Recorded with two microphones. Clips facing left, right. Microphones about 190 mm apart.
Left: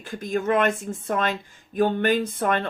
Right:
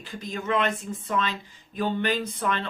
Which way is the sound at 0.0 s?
50° left (ahead or behind).